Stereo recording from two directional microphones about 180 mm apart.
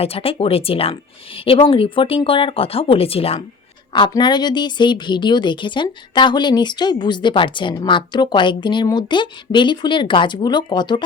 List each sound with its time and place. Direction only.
0.0 s a woman's voice: 30° left (ahead or behind)